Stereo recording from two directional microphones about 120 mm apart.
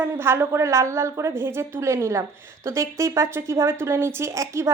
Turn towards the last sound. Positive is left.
turn(degrees=-25)  # may be behind; listen again after turning